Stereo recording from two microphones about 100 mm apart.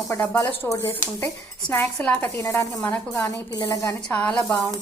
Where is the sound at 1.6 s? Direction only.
15° left (ahead or behind).